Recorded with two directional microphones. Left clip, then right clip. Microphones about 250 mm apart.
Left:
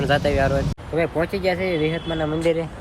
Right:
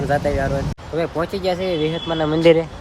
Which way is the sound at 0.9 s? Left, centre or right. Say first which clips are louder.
Even; centre.